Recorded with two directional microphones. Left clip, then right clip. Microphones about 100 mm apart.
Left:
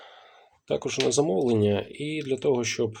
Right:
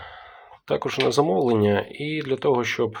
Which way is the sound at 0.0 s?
10° left (ahead or behind).